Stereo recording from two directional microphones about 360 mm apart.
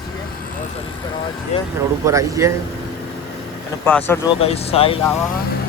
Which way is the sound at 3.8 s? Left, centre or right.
Centre.